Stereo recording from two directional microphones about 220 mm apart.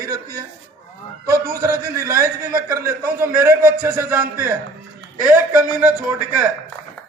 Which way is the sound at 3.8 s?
10° right (ahead or behind).